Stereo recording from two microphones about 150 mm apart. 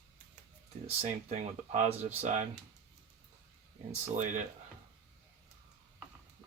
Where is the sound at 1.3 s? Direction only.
50° right (ahead or behind).